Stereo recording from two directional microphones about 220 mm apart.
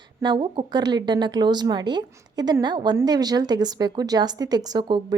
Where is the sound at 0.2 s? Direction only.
20° right (ahead or behind).